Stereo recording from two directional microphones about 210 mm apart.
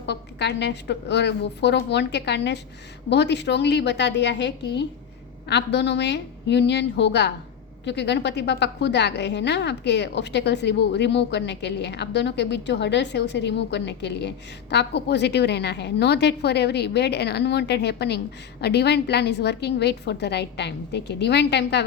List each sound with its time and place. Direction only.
0.0 s a woman's voice: 55° left (ahead or behind)